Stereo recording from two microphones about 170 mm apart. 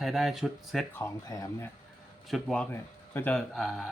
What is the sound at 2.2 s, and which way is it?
Speech, 5° left (ahead or behind).